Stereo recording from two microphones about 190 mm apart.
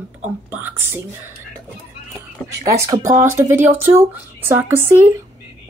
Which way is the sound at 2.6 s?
15° right (ahead or behind).